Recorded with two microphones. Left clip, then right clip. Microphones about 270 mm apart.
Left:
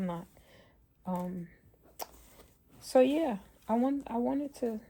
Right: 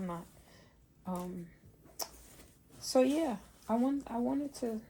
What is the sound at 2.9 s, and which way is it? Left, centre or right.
Speech, left.